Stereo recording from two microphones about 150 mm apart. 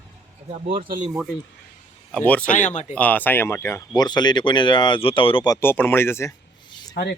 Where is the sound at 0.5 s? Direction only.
40° right (ahead or behind).